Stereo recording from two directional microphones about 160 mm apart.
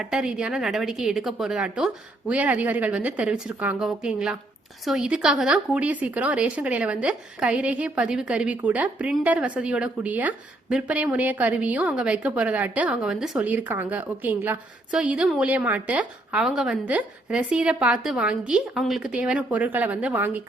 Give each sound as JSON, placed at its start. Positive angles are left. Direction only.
{"t": 0.0, "sound": "a woman's voice", "side_deg": -5}